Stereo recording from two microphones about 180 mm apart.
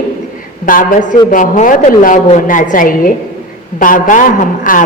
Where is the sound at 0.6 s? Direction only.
50° left (ahead or behind).